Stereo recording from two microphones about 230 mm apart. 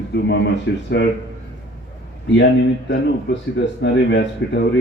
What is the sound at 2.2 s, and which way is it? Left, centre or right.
Speech, left.